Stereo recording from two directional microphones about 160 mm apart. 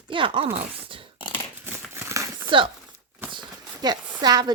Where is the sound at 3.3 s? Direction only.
25° right (ahead or behind).